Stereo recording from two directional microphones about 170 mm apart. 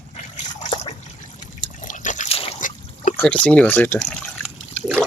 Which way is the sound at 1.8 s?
45° left (ahead or behind).